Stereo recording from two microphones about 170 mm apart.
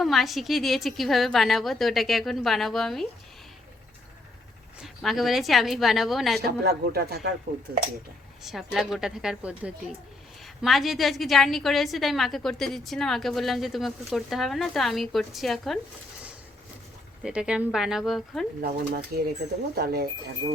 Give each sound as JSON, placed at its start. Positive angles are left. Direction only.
{"t": 0.0, "sound": "a woman's voice", "side_deg": 0}
{"t": 4.8, "sound": "a woman's voice", "side_deg": 0}
{"t": 6.4, "sound": "speech", "side_deg": -70}
{"t": 8.4, "sound": "a woman's voice", "side_deg": 0}
{"t": 17.2, "sound": "a woman's voice", "side_deg": -5}
{"t": 18.6, "sound": "speech", "side_deg": -65}